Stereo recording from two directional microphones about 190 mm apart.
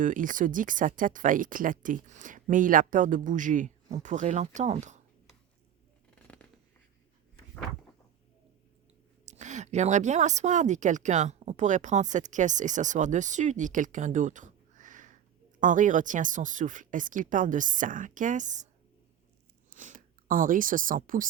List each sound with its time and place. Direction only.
0.0 s speech: 45° right (ahead or behind)
6.1 s scissors: 5° left (ahead or behind)
9.2 s a woman's voice: 40° right (ahead or behind)
19.7 s speech: 45° right (ahead or behind)